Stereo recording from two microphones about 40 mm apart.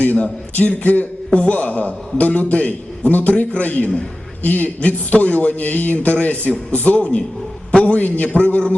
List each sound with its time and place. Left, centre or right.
0.0 s a man's voice: left
5.5 s a man's voice: left
7.7 s a sound: left
7.9 s a man's voice: left